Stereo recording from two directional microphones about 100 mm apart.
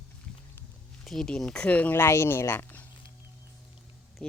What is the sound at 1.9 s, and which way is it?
Speech, 25° left (ahead or behind).